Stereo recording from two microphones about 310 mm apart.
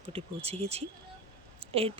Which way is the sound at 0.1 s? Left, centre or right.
Centre.